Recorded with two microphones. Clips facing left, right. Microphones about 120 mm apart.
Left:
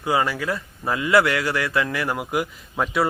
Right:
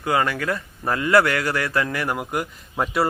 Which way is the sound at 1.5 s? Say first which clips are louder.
Even; 30° right (ahead or behind).